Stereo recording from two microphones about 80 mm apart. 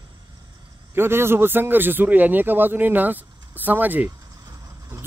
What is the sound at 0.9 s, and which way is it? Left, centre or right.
Speech, right.